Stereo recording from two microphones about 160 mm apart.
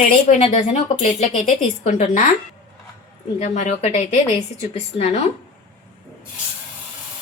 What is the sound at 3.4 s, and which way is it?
A woman's voice, 45° left (ahead or behind).